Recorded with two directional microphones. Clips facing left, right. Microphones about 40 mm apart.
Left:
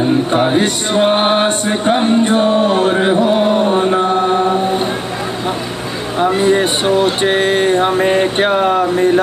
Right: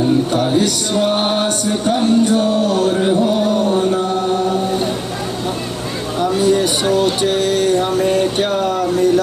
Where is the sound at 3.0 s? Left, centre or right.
Left.